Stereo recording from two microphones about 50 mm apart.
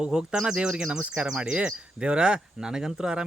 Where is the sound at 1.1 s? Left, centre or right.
Centre.